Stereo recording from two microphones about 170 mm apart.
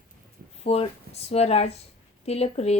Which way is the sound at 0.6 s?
40° left (ahead or behind).